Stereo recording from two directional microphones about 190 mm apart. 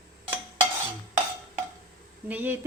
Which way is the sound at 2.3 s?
10° right (ahead or behind).